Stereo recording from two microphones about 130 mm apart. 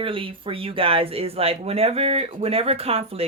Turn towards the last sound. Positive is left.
turn(degrees=-50)  # may be behind; listen again after turning